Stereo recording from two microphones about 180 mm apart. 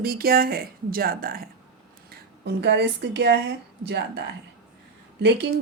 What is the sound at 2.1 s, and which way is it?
Speech, 70° right (ahead or behind).